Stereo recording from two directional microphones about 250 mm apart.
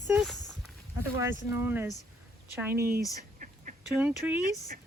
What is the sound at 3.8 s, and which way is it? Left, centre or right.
Speech, centre.